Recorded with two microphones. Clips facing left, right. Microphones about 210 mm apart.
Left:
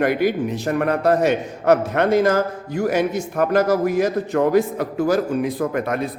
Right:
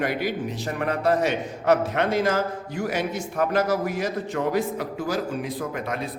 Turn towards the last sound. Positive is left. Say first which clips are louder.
# left 7 dB
turn(degrees=55)  # may be behind; listen again after turning